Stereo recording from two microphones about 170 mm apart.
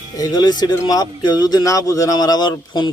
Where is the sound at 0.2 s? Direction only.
25° left (ahead or behind).